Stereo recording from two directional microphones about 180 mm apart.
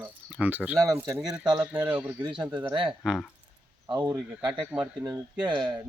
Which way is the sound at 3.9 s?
25° right (ahead or behind).